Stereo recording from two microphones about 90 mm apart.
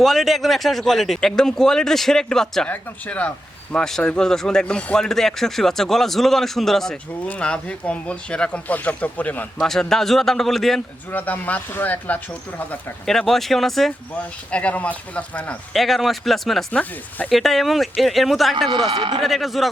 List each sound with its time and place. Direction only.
0.0 s speech: centre (ahead or behind); by 9.5 s 15° left (ahead or behind)
9.6 s speech: 5° left (ahead or behind)
11.1 s speech: 20° left (ahead or behind)
13.1 s speech: 5° left (ahead or behind)
14.2 s speech: 15° left (ahead or behind)
15.7 s speech: centre (ahead or behind)
18.9 s speech: 60° right (ahead or behind)
19.2 s speech: centre (ahead or behind)